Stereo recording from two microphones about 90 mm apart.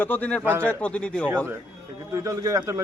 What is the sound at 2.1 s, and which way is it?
Speech, 35° right (ahead or behind).